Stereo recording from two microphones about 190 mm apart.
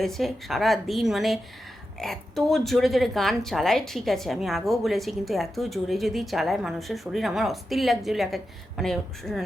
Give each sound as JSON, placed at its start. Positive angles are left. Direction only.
{"t": 0.0, "sound": "speech", "side_deg": 0}